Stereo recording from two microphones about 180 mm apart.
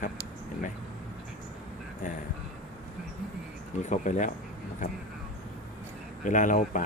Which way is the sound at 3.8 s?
45° left (ahead or behind).